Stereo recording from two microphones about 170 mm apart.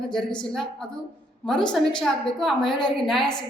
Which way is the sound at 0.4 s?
Centre (ahead or behind).